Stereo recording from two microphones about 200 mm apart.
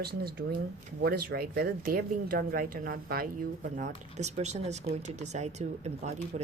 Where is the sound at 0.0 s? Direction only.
50° right (ahead or behind).